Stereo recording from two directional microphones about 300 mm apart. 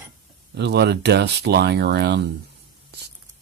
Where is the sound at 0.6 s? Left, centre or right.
Right.